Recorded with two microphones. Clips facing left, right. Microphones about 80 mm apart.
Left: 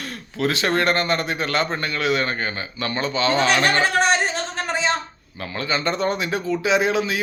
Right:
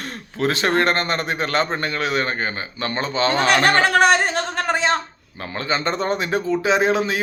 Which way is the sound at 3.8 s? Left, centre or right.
Right.